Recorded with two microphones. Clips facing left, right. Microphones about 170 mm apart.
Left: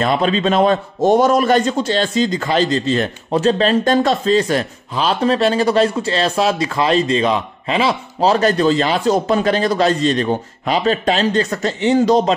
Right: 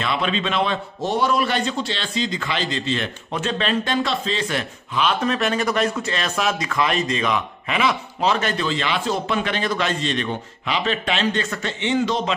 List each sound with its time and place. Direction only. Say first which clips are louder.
0.0 s a man's voice: left 7 dB; 40° left (ahead or behind)